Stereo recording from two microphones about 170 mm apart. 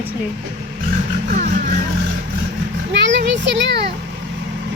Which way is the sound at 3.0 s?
90° right.